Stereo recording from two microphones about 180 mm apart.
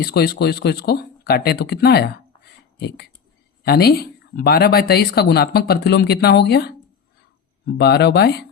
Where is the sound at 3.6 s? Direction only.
60° left (ahead or behind).